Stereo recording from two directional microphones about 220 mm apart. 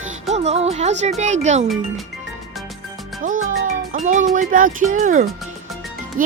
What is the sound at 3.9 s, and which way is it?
Speech, 35° right (ahead or behind).